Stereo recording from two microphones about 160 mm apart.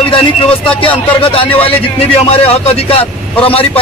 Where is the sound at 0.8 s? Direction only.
35° left (ahead or behind).